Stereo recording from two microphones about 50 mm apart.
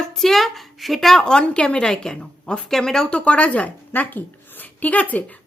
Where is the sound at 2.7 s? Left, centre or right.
Centre.